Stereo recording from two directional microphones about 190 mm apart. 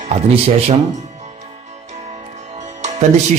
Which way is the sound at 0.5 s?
30° right (ahead or behind).